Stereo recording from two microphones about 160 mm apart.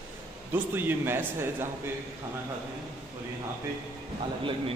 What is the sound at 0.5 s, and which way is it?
Speech, 10° right (ahead or behind).